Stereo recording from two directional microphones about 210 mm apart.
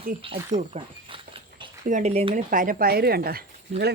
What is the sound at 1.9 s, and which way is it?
Speech, 30° right (ahead or behind).